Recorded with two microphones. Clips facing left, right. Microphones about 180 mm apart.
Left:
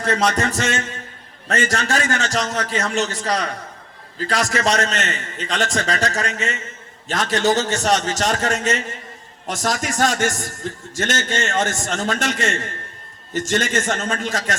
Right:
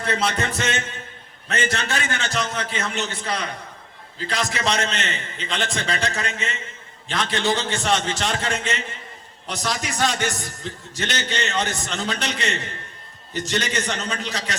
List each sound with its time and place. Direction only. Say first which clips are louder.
0.0 s a man's voice: left 4 dB; 45° left (ahead or behind)